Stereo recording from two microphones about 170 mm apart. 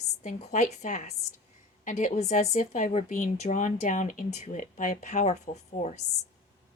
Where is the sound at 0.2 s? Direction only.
40° left (ahead or behind).